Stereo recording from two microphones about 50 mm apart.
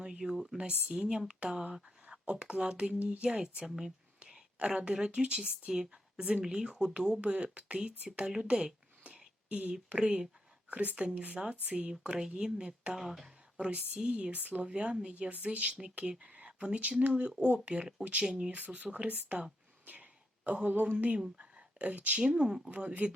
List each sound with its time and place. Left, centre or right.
0.0 s a sound: centre
0.5 s speech: right
3.2 s a woman's voice: centre
8.1 s a sound: centre
9.9 s speech: right
10.7 s a woman's voice: right
13.0 s speech: centre
13.6 s speech: right
15.1 s a woman's voice: right
18.6 s speech: right
19.8 s a sound: right
21.3 s speech: right
22.3 s a woman's voice: centre
22.7 s speech: right